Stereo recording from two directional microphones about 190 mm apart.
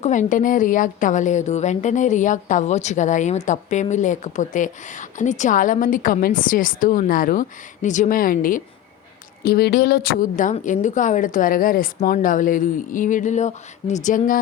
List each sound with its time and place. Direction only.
0.0 s a woman's voice: 40° left (ahead or behind)